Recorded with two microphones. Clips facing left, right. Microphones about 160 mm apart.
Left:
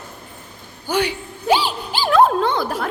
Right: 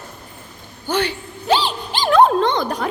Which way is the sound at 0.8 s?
10° left (ahead or behind).